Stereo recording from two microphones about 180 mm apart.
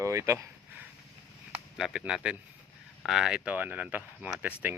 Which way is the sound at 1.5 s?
5° right (ahead or behind).